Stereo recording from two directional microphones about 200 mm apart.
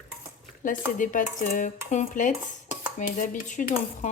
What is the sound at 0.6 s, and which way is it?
Speech, 40° left (ahead or behind).